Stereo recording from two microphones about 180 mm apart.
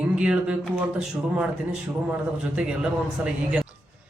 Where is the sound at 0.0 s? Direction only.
5° right (ahead or behind).